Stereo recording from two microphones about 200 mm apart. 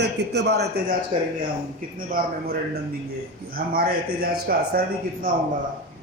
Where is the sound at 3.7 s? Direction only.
45° right (ahead or behind).